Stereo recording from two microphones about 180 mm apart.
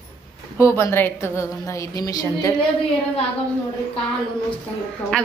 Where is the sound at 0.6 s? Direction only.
15° left (ahead or behind).